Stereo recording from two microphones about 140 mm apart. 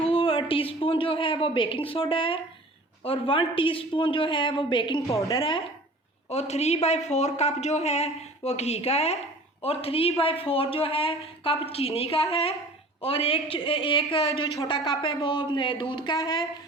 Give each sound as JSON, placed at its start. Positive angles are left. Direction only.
{"t": 0.0, "sound": "a woman's voice", "side_deg": 40}
{"t": 5.0, "sound": "a woman's voice", "side_deg": 20}
{"t": 5.4, "sound": "a woman's voice", "side_deg": 40}